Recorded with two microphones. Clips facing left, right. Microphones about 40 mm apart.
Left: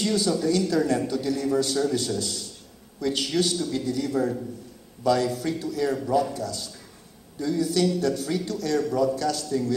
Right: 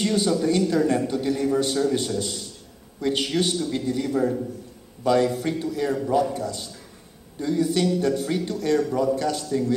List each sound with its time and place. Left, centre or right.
0.0 s a man's voice: right
4.1 s a man's voice: right
5.0 s a man's voice: right